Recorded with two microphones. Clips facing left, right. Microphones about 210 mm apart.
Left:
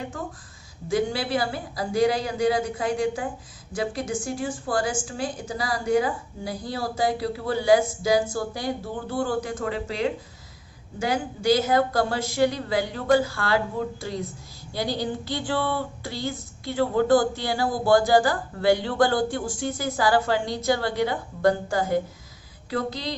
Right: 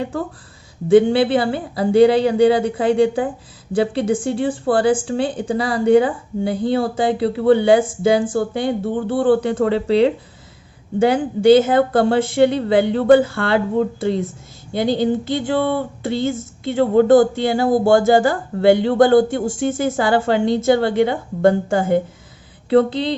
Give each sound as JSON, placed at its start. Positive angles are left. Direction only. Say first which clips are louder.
{"t": 0.9, "sound": "a woman's voice", "louder": "right 12 dB", "side_deg": -30}
{"t": 8.2, "sound": "speech", "louder": "right 8 dB", "side_deg": -50}
{"t": 8.5, "sound": "a woman's voice", "louder": "right 9 dB", "side_deg": -25}